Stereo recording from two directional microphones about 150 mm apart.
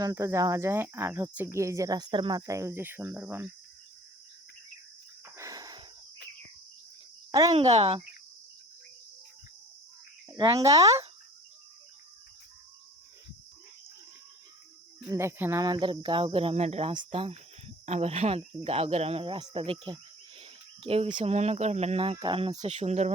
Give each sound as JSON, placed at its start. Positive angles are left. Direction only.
{"t": 0.0, "sound": "speech", "side_deg": -25}
{"t": 5.4, "sound": "wheeze", "side_deg": -20}
{"t": 7.3, "sound": "speech", "side_deg": -25}
{"t": 7.5, "sound": "speech", "side_deg": -40}
{"t": 10.2, "sound": "speech", "side_deg": -30}
{"t": 15.1, "sound": "speech", "side_deg": -20}
{"t": 20.4, "sound": "cricket", "side_deg": -40}
{"t": 21.3, "sound": "speech", "side_deg": -45}